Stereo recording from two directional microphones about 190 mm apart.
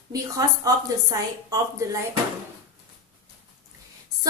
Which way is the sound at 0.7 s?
20° right (ahead or behind).